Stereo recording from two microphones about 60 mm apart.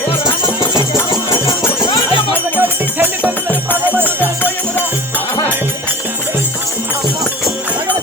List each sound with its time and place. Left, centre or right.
2.6 s music: right